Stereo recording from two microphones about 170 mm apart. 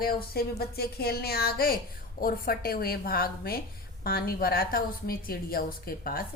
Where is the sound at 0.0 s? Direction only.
65° left (ahead or behind).